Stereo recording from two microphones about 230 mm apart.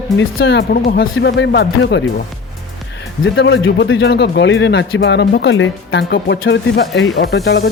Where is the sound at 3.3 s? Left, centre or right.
Left.